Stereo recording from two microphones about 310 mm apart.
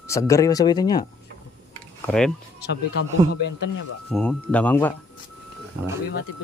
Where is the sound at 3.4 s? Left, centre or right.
Left.